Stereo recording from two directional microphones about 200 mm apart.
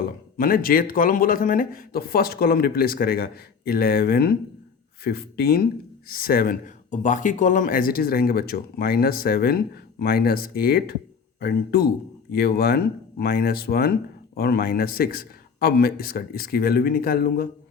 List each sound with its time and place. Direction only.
0.3 s speech: 45° left (ahead or behind)